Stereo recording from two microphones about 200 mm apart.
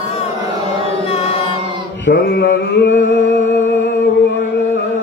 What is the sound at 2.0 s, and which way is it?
Mantra, 55° left (ahead or behind).